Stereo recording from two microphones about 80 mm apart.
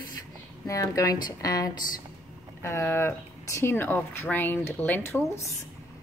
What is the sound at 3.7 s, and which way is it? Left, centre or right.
Speech, left.